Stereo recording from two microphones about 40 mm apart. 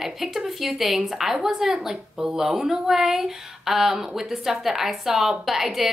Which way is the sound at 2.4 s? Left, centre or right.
Centre.